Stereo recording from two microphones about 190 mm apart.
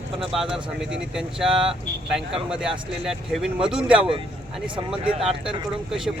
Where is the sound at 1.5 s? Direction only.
30° right (ahead or behind).